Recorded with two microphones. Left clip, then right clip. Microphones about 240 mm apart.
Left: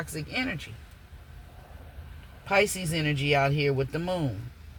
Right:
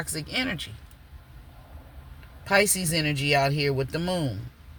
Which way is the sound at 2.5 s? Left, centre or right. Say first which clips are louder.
Right 2 dB; centre.